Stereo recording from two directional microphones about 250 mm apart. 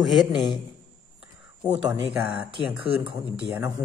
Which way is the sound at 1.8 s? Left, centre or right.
Centre.